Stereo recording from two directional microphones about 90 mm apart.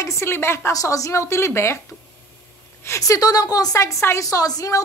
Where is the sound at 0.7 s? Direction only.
40° left (ahead or behind).